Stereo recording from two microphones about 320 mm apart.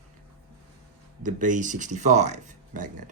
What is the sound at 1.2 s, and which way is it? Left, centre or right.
Speech, right.